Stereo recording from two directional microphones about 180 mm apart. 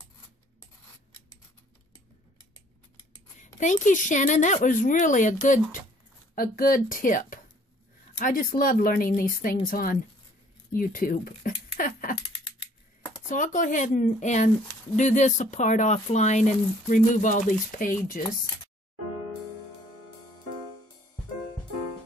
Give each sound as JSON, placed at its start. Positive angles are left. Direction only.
{"t": 3.3, "sound": "a woman's voice", "side_deg": 45}
{"t": 11.7, "sound": "a sound", "side_deg": 50}
{"t": 12.2, "sound": "scissors", "side_deg": 25}
{"t": 13.3, "sound": "a woman's voice", "side_deg": 45}